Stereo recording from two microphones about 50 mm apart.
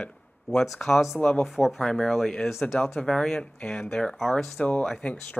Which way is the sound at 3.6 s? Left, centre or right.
Centre.